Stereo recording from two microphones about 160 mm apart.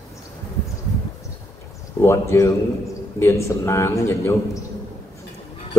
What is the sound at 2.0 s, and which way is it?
A man's voice, 15° left (ahead or behind).